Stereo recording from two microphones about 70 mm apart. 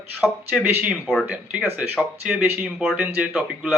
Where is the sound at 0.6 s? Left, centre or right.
Right.